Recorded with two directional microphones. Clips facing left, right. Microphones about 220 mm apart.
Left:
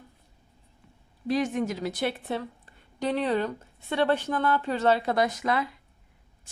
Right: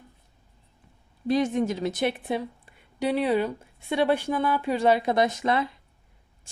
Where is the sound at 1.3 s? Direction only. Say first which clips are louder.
Right 3 dB; 25° right (ahead or behind).